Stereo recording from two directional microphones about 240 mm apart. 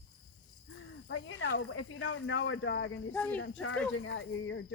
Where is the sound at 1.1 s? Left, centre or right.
Left.